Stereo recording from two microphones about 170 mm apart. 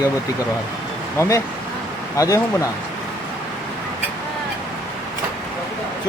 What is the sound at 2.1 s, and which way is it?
Speech, 20° left (ahead or behind).